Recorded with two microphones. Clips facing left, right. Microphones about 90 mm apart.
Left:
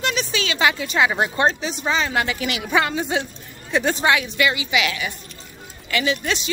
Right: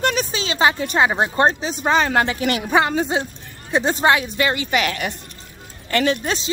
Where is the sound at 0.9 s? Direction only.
30° right (ahead or behind).